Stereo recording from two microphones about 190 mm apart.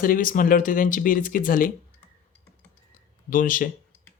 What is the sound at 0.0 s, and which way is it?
Speech, 45° left (ahead or behind).